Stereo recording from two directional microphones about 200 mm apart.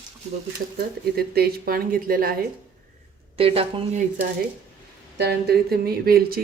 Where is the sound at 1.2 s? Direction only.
50° right (ahead or behind).